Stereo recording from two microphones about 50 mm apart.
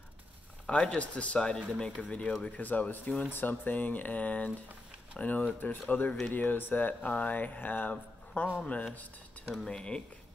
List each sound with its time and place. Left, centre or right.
0.7 s speech: left
3.3 s speech: left
8.6 s speech: left
9.6 s speech: centre